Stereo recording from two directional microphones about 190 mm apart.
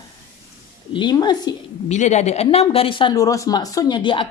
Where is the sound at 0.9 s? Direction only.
20° left (ahead or behind).